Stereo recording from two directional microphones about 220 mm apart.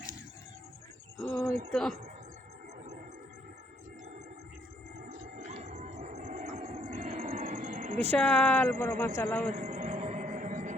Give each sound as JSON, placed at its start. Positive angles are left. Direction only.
{"t": 1.2, "sound": "speech", "side_deg": 0}
{"t": 5.0, "sound": "music", "side_deg": -35}
{"t": 7.9, "sound": "speech", "side_deg": 10}
{"t": 9.5, "sound": "a sound", "side_deg": -30}